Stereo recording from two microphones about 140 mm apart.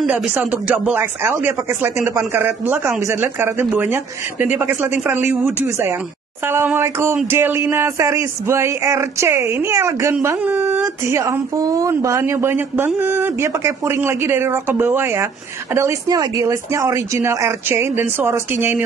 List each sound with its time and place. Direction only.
0.0 s speech: 10° right (ahead or behind)